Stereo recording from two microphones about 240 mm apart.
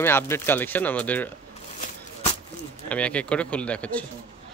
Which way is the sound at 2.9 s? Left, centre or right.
Centre.